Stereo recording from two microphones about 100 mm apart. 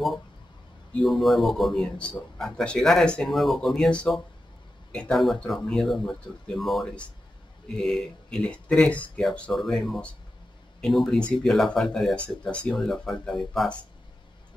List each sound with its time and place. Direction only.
1.0 s speech: centre (ahead or behind)